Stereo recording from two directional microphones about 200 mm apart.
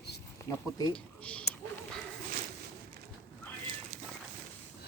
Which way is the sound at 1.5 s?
50° left (ahead or behind).